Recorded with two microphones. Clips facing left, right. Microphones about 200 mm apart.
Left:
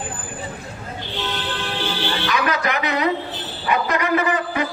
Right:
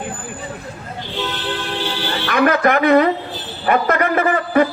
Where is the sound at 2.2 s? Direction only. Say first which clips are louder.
Right 9 dB; 55° right (ahead or behind).